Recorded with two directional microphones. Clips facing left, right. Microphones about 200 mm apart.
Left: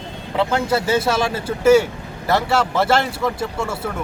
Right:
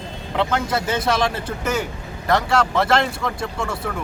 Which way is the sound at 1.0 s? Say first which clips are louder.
Left 1 dB; 25° left (ahead or behind).